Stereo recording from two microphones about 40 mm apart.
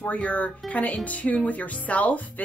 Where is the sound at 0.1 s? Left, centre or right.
Left.